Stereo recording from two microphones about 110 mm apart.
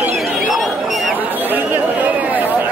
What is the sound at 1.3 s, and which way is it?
Chatter, 15° right (ahead or behind).